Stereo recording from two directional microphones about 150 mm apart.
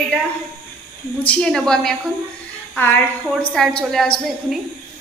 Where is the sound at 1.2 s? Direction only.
5° left (ahead or behind).